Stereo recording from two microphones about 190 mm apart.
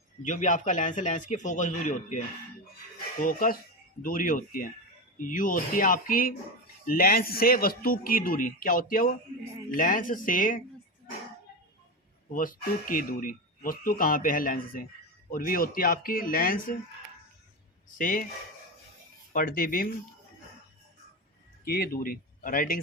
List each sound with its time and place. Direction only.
0.3 s speech: 40° left (ahead or behind)
12.3 s speech: 45° left (ahead or behind)
17.9 s speech: 45° left (ahead or behind)
19.3 s speech: 50° left (ahead or behind)
21.6 s speech: 50° left (ahead or behind)